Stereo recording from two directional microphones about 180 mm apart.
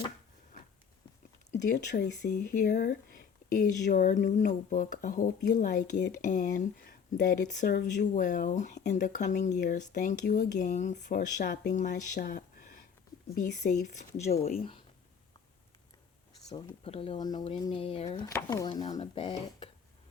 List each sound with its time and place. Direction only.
2.2 s speech: 60° left (ahead or behind); by 14.8 s 30° left (ahead or behind)
16.6 s speech: 30° left (ahead or behind)
18.3 s speech: 20° left (ahead or behind)
18.9 s speech: 35° left (ahead or behind)